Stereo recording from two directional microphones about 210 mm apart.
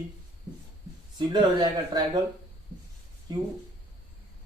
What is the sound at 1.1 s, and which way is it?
Speech, 20° right (ahead or behind).